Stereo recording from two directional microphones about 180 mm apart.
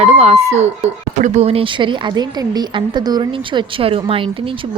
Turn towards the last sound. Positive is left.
turn(degrees=-30)  # may be behind; listen again after turning